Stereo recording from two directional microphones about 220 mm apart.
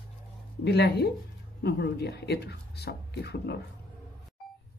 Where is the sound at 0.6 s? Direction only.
45° left (ahead or behind).